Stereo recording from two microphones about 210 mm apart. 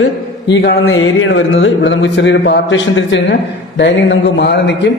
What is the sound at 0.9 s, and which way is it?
Speech, 70° left (ahead or behind).